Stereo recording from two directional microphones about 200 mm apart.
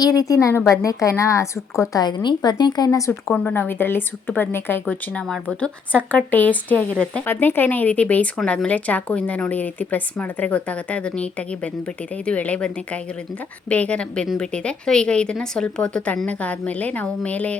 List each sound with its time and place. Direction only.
0.0 s a woman's voice: 20° left (ahead or behind)